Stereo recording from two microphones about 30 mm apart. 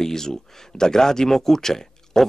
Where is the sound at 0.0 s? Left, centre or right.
Centre.